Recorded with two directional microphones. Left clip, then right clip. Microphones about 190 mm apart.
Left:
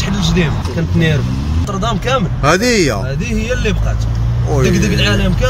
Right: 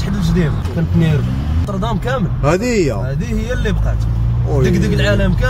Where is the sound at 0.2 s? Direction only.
55° right (ahead or behind).